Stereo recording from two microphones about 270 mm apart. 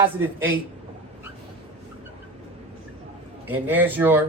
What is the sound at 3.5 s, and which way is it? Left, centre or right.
Speech, centre.